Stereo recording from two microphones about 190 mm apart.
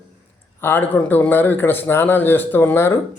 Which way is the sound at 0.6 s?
10° left (ahead or behind).